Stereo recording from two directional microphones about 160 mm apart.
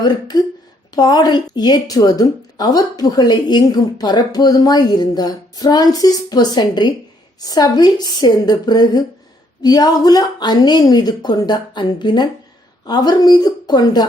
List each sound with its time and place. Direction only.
0.0 s a woman's voice: 25° left (ahead or behind)